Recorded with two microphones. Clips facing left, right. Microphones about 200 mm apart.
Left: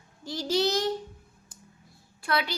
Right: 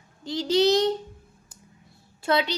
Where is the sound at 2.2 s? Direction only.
25° right (ahead or behind).